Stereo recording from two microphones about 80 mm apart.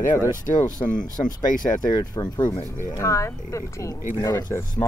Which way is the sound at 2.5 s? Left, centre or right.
Right.